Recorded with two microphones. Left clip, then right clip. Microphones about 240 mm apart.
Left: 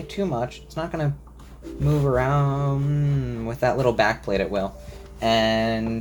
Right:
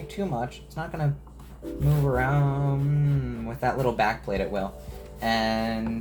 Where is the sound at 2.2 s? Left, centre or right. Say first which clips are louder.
Left 4 dB; left.